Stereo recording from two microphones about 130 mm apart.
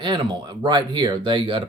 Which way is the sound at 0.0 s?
35° right (ahead or behind).